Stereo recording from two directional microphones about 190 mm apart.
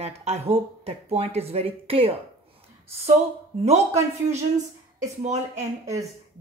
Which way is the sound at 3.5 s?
35° right (ahead or behind).